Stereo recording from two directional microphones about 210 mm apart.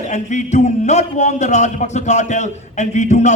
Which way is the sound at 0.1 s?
35° left (ahead or behind).